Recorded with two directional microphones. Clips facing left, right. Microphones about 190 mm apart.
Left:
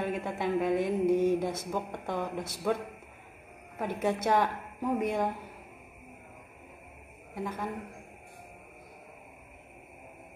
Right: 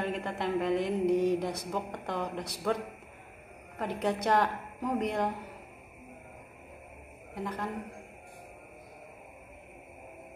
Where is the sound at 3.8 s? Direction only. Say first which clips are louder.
Left 1 dB; 5° left (ahead or behind).